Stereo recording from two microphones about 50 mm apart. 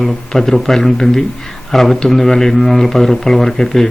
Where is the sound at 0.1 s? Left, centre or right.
Centre.